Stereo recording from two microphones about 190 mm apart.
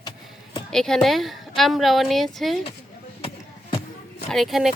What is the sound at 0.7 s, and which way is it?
A woman's voice, centre (ahead or behind).